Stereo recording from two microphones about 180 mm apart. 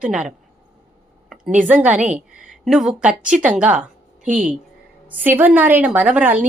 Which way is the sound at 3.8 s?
45° right (ahead or behind).